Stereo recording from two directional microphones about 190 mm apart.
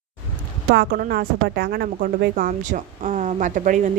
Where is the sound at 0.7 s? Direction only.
55° right (ahead or behind).